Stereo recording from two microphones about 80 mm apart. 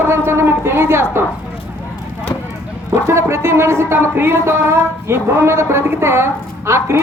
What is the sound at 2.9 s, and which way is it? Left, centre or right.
Speech, right.